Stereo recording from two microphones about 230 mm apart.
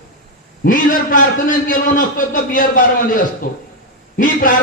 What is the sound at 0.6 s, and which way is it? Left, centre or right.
A man's voice, left.